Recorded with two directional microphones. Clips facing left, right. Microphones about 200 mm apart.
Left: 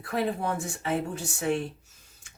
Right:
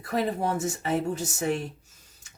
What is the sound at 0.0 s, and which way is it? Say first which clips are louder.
Speech: right 2 dB; 40° right (ahead or behind).